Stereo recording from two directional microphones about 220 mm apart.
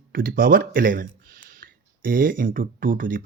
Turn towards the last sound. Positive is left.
turn(degrees=-40)  # may be behind; listen again after turning